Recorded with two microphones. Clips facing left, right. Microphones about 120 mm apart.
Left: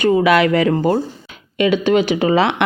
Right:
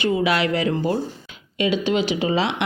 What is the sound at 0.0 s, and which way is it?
Speech, 50° left (ahead or behind).